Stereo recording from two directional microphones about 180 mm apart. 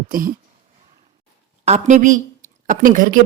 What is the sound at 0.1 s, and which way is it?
Speech, 50° right (ahead or behind).